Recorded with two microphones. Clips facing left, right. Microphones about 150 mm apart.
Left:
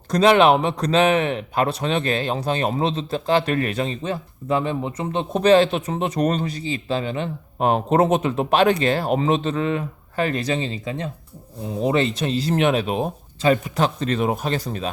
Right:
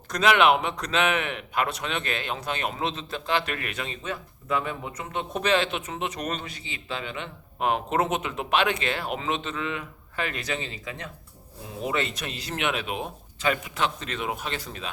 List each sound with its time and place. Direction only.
0.1 s speech: 35° left (ahead or behind)